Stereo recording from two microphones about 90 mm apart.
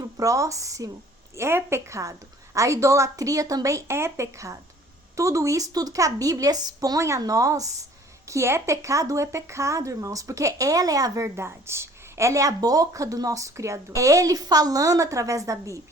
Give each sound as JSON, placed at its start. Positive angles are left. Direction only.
{"t": 0.2, "sound": "speech", "side_deg": -35}